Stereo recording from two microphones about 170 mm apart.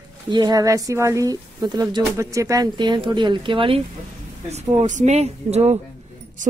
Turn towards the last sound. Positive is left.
turn(degrees=-50)  # may be behind; listen again after turning